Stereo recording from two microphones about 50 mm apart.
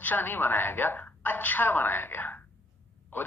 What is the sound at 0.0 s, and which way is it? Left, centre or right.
A woman's voice, left.